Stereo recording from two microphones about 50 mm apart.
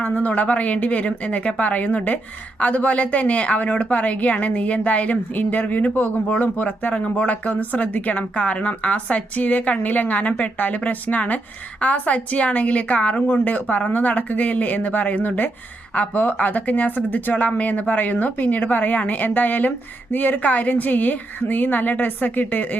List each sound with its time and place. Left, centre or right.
0.0 s speech: left